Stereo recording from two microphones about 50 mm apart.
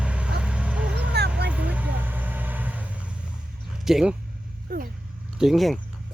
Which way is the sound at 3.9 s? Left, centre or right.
Centre.